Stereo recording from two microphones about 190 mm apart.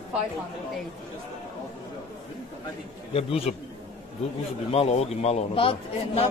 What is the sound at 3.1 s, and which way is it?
Speech, 30° left (ahead or behind).